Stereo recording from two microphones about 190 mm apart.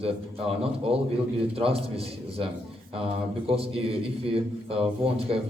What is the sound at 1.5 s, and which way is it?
Speech, 30° right (ahead or behind).